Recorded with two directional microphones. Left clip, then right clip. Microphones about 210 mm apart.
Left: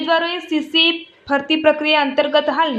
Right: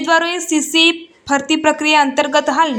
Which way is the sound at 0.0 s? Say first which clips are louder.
Right 3 dB; 15° right (ahead or behind).